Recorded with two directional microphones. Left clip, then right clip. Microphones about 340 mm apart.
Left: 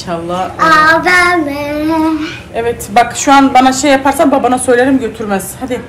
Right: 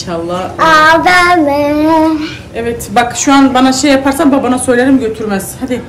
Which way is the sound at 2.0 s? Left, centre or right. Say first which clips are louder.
Right 1 dB; centre.